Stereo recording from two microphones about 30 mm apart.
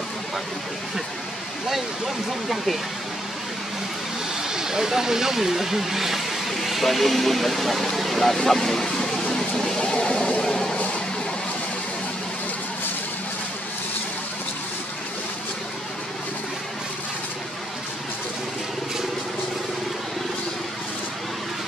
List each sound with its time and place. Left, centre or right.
2.5 s speech: centre
4.4 s speech: centre
10.4 s a sound: left